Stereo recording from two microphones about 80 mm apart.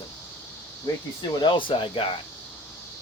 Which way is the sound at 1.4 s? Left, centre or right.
Left.